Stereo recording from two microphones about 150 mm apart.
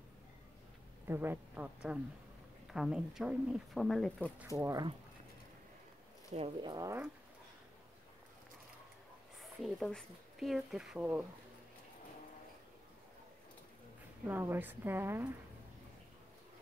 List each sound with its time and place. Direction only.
1.0 s a woman's voice: 15° right (ahead or behind); by 4.3 s 5° left (ahead or behind)
4.6 s speech: 20° right (ahead or behind)
6.3 s speech: 40° right (ahead or behind)
6.7 s speech: 25° right (ahead or behind)
9.4 s speech: centre (ahead or behind)
14.2 s a woman's voice: 15° right (ahead or behind)